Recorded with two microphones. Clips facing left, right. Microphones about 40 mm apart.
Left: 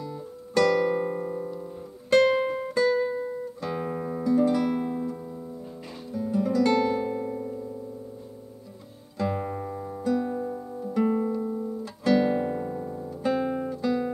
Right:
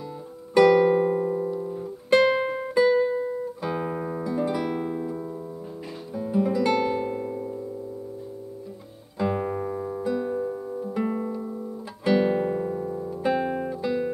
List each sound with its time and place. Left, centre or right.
0.6 s music: centre
6.1 s guitar: centre
9.2 s music: centre
12.0 s guitar: centre